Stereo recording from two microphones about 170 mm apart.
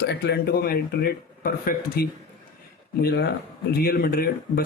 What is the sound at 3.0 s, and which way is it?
Speech, 75° left (ahead or behind).